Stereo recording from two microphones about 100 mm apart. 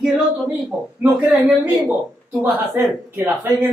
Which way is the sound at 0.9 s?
15° right (ahead or behind).